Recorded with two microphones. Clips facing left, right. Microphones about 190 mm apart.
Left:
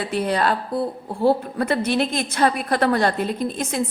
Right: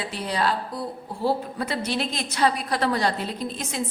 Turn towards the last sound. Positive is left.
turn(degrees=55)  # may be behind; listen again after turning